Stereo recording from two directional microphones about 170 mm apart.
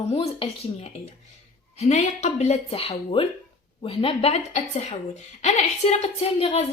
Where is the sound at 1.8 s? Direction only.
40° left (ahead or behind).